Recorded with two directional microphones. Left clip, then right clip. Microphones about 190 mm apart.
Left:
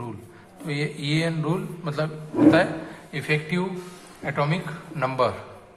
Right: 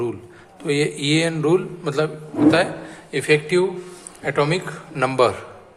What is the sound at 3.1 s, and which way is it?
A man's voice, 45° right (ahead or behind).